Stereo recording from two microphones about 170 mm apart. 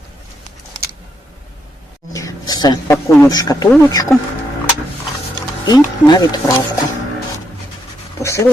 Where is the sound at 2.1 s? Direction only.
20° left (ahead or behind).